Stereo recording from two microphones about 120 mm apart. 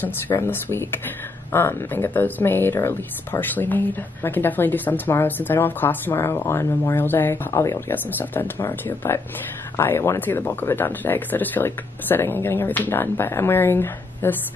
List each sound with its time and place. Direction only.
0.0 s speech: 20° left (ahead or behind)